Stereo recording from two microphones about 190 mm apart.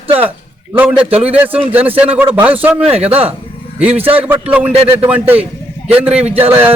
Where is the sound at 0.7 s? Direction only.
10° right (ahead or behind).